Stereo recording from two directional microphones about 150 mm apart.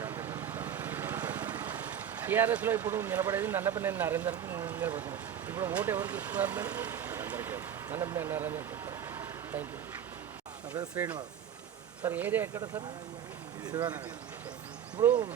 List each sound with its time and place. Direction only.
0.0 s vehicle: 15° right (ahead or behind)
10.9 s speech: 10° right (ahead or behind)
13.7 s speech: 25° right (ahead or behind)